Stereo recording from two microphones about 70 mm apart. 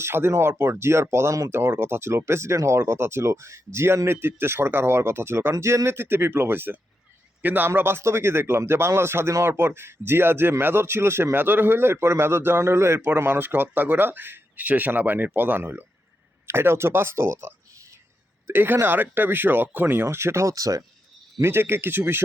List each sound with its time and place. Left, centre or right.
0.0 s speech: right
21.4 s speech: right